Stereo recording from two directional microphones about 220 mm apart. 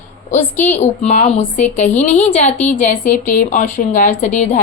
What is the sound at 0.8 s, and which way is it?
A woman's voice, 30° left (ahead or behind).